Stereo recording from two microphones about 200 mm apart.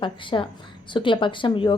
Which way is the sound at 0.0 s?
25° left (ahead or behind).